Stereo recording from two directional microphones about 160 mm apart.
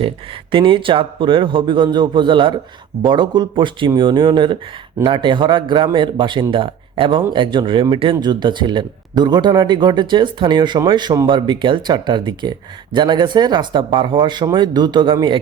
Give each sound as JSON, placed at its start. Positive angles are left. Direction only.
{"t": 0.5, "sound": "speech", "side_deg": -30}